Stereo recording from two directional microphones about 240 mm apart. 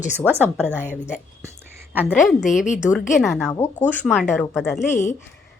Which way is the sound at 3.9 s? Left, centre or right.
Centre.